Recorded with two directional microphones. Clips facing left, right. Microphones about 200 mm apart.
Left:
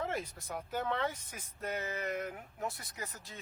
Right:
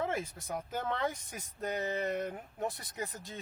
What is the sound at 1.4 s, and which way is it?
Speech, 40° right (ahead or behind).